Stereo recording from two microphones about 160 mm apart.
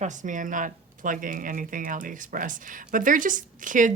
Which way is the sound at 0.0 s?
50° right (ahead or behind).